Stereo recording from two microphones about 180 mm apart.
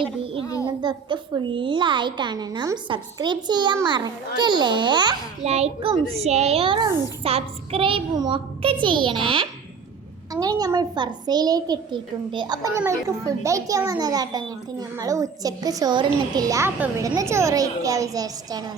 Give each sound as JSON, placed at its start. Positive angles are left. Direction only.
{"t": 0.6, "sound": "a child's voice", "side_deg": -25}
{"t": 5.4, "sound": "a child's voice", "side_deg": -35}